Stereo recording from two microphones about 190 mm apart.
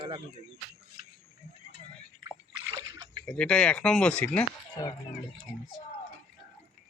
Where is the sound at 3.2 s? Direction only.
5° left (ahead or behind).